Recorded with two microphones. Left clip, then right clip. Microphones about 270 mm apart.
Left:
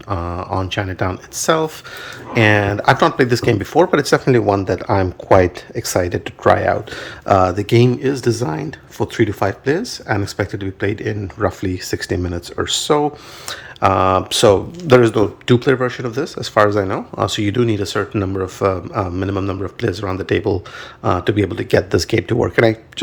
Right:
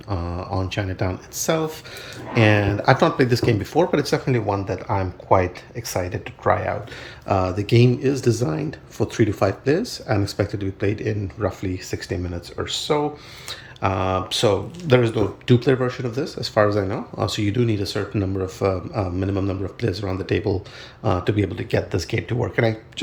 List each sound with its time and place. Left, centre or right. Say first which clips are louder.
0.1 s speech: left 6 dB; centre
11.3 s speech: left 6 dB; centre